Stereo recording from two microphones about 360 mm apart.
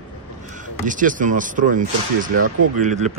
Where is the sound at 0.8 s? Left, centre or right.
Right.